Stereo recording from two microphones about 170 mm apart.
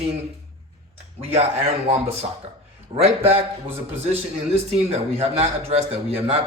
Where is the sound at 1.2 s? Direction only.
35° right (ahead or behind).